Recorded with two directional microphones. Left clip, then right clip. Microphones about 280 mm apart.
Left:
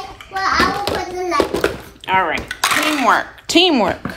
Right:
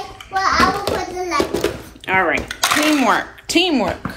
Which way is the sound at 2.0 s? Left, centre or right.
Centre.